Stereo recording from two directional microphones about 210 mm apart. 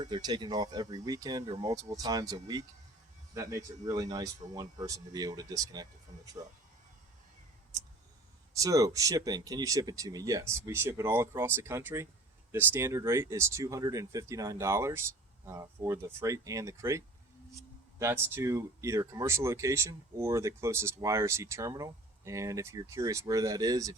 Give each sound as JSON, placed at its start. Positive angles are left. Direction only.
{"t": 0.0, "sound": "speech", "side_deg": -20}
{"t": 8.5, "sound": "speech", "side_deg": -15}
{"t": 18.0, "sound": "speech", "side_deg": -10}